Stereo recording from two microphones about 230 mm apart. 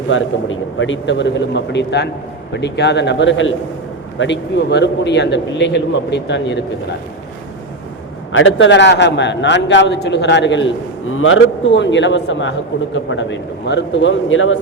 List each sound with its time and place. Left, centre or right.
0.1 s a man's voice: left
8.3 s a man's voice: left